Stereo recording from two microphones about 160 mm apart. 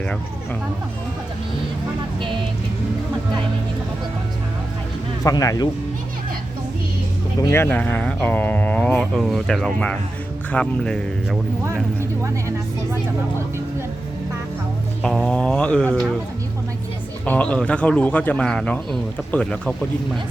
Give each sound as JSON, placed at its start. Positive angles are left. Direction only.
{"t": 5.2, "sound": "speech", "side_deg": 20}
{"t": 7.4, "sound": "speech", "side_deg": 15}
{"t": 11.6, "sound": "speech", "side_deg": -15}
{"t": 15.0, "sound": "speech", "side_deg": 5}
{"t": 17.2, "sound": "speech", "side_deg": 10}